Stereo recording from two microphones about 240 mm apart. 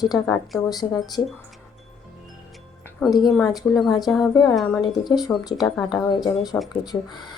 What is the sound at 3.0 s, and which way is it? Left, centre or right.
Speech, centre.